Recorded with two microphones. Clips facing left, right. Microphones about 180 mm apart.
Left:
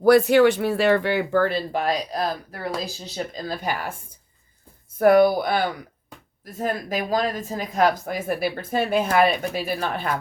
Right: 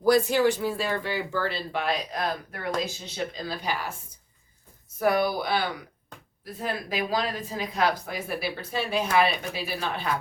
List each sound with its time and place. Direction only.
0.0 s speech: 65° left (ahead or behind)
4.9 s speech: 50° left (ahead or behind)